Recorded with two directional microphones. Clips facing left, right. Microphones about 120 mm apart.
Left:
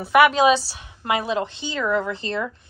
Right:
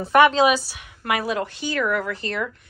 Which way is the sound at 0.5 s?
30° left (ahead or behind).